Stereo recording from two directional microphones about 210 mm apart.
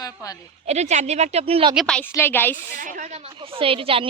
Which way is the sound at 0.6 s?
30° right (ahead or behind).